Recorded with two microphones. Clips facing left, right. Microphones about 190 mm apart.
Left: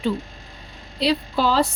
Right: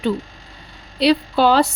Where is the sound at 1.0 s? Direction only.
70° right (ahead or behind).